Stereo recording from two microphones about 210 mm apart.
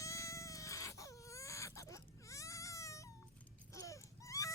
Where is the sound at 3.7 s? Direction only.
15° left (ahead or behind).